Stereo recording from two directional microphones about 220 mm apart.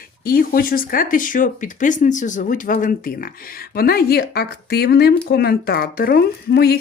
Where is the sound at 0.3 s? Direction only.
40° left (ahead or behind).